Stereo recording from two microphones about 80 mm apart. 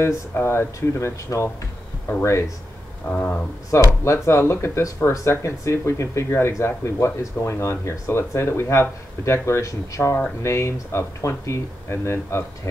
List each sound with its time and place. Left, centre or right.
0.3 s speech: left
3.1 s speech: centre
3.7 s speech: left